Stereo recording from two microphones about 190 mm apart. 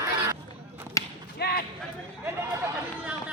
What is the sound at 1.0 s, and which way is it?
Basketball bounce, 15° left (ahead or behind).